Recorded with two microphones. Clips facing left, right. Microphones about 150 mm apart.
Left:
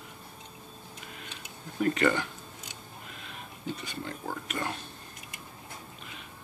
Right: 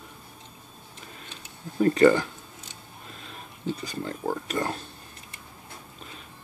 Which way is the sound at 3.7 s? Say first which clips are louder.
Right 5 dB; 35° right (ahead or behind).